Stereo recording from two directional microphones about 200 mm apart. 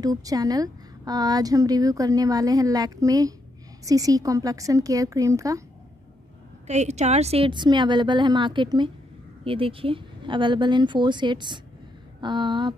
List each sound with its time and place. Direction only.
0.0 s a woman's voice: 20° right (ahead or behind)
6.7 s a woman's voice: 35° right (ahead or behind)